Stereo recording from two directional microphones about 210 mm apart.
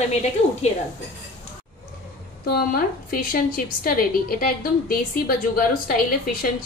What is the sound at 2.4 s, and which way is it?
A woman's voice, 45° left (ahead or behind).